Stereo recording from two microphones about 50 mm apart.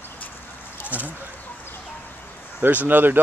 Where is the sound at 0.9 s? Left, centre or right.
Right.